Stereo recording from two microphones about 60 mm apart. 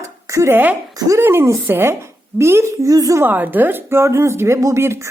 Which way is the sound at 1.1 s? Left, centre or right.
Right.